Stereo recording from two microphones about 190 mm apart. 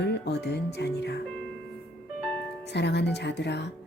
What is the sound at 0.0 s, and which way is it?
Speech, 65° left (ahead or behind).